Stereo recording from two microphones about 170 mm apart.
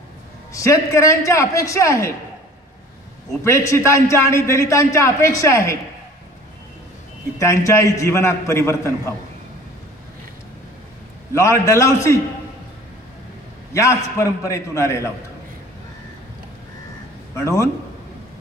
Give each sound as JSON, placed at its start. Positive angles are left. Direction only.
{"t": 0.5, "sound": "a man's voice", "side_deg": 20}
{"t": 3.4, "sound": "a man's voice", "side_deg": 15}
{"t": 7.3, "sound": "a man's voice", "side_deg": 15}
{"t": 11.3, "sound": "a man's voice", "side_deg": 15}
{"t": 13.7, "sound": "a man's voice", "side_deg": 15}
{"t": 17.4, "sound": "a man's voice", "side_deg": 15}